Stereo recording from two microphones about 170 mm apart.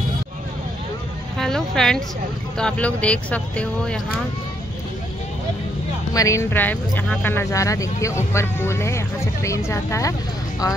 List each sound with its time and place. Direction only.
1.4 s a woman's voice: 5° left (ahead or behind)
6.1 s speech: 20° left (ahead or behind)